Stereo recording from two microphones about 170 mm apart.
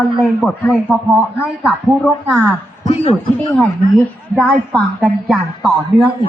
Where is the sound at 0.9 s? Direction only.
10° right (ahead or behind).